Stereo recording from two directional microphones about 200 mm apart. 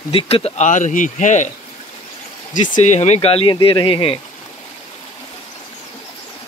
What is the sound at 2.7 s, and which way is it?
Speech, 35° left (ahead or behind).